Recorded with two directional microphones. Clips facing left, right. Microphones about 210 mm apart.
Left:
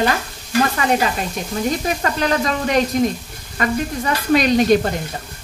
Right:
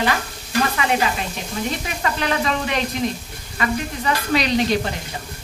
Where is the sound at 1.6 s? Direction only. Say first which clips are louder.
Left 5 dB; 40° left (ahead or behind).